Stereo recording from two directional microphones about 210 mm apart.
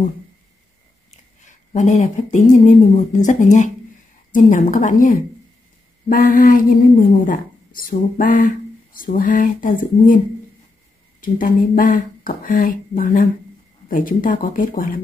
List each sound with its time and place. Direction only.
1.4 s speech: 35° left (ahead or behind)